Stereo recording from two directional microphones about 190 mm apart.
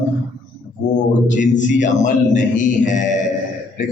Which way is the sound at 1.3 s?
40° left (ahead or behind).